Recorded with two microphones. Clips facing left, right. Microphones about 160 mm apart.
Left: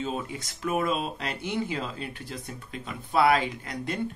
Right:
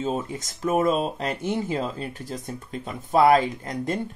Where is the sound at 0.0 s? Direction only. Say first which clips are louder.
Right 4 dB; 45° right (ahead or behind).